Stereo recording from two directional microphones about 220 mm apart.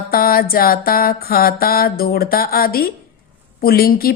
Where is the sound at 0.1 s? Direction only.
40° left (ahead or behind).